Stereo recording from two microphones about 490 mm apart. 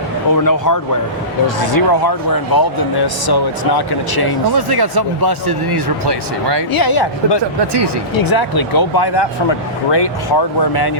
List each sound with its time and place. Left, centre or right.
0.3 s speech: left
4.5 s speech: right
6.7 s speech: left